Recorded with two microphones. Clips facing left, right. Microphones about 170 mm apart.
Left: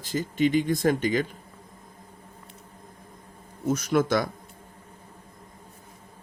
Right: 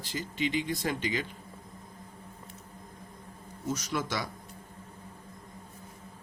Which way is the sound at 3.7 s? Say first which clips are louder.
Left 10 dB; 55° left (ahead or behind).